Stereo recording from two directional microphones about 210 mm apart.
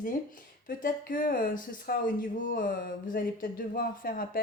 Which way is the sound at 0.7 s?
40° left (ahead or behind).